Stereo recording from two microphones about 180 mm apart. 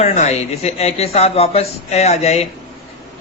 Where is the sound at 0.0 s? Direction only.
35° left (ahead or behind).